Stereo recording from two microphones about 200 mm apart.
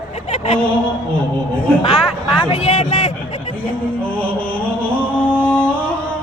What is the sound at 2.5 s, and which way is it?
Speech, 35° left (ahead or behind).